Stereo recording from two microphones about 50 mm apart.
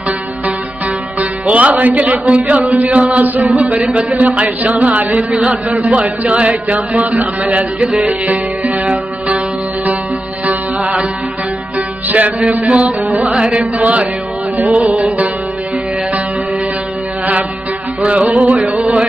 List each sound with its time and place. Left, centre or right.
1.5 s a man's voice: right
10.4 s music: right
12.1 s music: right
12.6 s a man's voice: right
18.3 s music: right
18.8 s music: right